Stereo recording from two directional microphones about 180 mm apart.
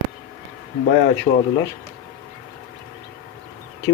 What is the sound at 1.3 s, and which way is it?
Speech, 30° left (ahead or behind).